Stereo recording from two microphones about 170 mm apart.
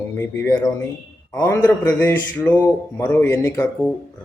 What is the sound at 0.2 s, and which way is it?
Speech, 15° left (ahead or behind).